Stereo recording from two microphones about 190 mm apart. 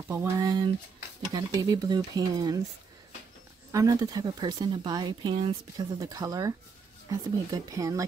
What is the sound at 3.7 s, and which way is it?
Speech, 20° right (ahead or behind).